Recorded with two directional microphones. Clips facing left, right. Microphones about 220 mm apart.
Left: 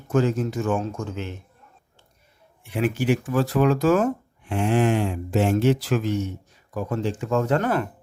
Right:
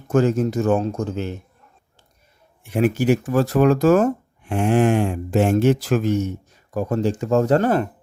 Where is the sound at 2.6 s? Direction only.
45° right (ahead or behind).